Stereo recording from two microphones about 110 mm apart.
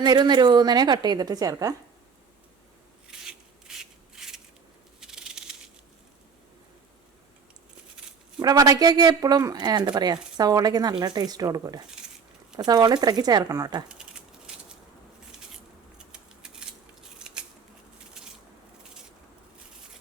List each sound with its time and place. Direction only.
0.0 s speech: 40° right (ahead or behind)
3.1 s rub: 5° right (ahead or behind)
4.9 s a sound: 5° right (ahead or behind)
8.4 s speech: 35° right (ahead or behind)
13.8 s a sound: 10° right (ahead or behind)
16.1 s scissors: 5° right (ahead or behind)